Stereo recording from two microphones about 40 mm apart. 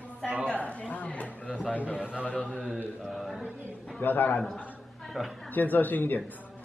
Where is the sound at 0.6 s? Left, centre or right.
Left.